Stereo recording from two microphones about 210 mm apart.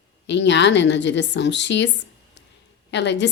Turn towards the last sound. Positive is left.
turn(degrees=55)  # may be behind; listen again after turning